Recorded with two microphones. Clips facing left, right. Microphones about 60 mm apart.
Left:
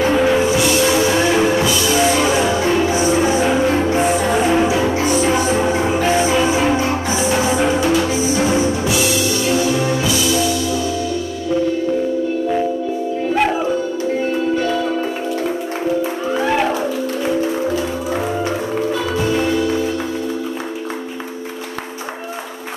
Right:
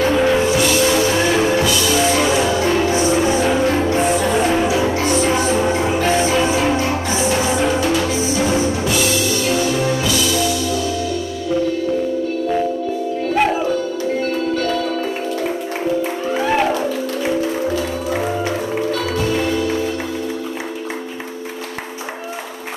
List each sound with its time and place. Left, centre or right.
0.0 s music: centre
2.9 s music: centre
8.0 s music: left
14.5 s music: centre
16.3 s music: centre
18.9 s music: centre
19.4 s music: centre